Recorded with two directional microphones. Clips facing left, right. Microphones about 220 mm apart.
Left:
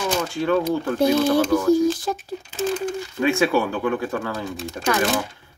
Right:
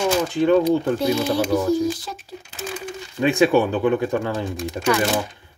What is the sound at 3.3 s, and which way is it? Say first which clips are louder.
Speech: right 3 dB; 20° right (ahead or behind).